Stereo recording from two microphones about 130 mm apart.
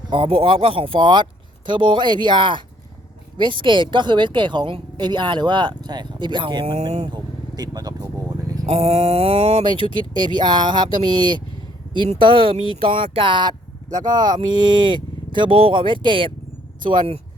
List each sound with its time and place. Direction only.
0.1 s a woman's voice: 45° right (ahead or behind)
7.1 s vehicle: 30° right (ahead or behind)
8.6 s speech: 55° right (ahead or behind)
9.6 s a woman's voice: 40° right (ahead or behind)